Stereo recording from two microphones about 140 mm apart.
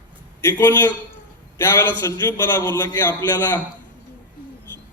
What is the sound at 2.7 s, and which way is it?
Speech, 15° left (ahead or behind).